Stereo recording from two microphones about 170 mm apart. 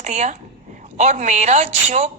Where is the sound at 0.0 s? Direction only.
45° right (ahead or behind).